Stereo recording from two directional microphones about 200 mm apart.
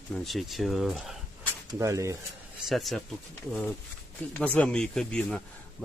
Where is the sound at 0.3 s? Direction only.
Centre (ahead or behind).